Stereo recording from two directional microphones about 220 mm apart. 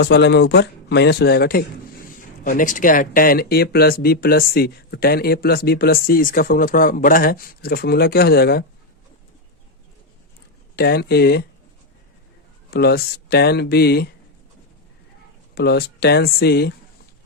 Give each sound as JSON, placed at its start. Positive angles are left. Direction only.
{"t": 0.0, "sound": "speech", "side_deg": 50}
{"t": 10.8, "sound": "speech", "side_deg": 45}
{"t": 12.7, "sound": "speech", "side_deg": 45}
{"t": 15.5, "sound": "speech", "side_deg": 50}